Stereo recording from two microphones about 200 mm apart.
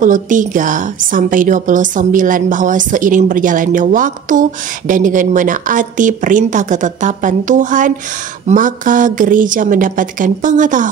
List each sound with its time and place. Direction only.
0.0 s a woman's voice: 40° right (ahead or behind)